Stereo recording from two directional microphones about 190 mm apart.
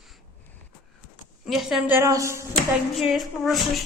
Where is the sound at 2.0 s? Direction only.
15° right (ahead or behind).